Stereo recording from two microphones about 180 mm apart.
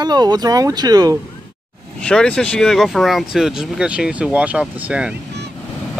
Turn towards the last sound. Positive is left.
turn(degrees=-5)  # may be behind; listen again after turning